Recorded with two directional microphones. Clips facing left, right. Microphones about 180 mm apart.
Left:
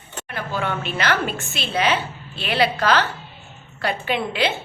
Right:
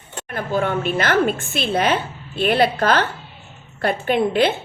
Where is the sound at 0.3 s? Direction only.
45° right (ahead or behind).